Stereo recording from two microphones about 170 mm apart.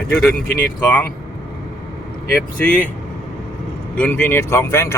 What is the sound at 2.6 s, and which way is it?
Speech, 10° left (ahead or behind).